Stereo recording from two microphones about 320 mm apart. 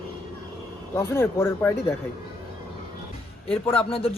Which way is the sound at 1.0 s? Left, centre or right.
Centre.